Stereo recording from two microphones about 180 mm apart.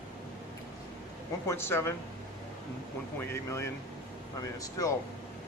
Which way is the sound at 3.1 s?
15° left (ahead or behind).